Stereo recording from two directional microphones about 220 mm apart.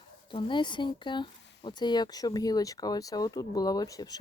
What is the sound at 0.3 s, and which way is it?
Speech, 20° left (ahead or behind).